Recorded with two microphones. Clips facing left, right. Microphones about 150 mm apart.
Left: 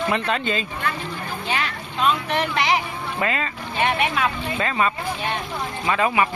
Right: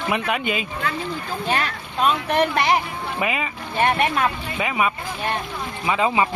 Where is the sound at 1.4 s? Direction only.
45° right (ahead or behind).